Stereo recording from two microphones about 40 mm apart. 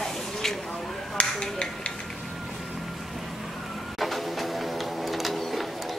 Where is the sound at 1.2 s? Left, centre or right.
Left.